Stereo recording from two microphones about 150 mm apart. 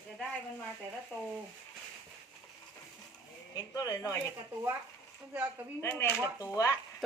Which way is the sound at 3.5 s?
25° left (ahead or behind).